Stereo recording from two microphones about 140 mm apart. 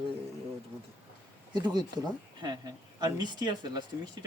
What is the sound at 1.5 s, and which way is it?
Speech, 30° right (ahead or behind).